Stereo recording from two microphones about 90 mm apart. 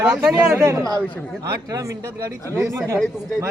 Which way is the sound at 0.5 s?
35° right (ahead or behind).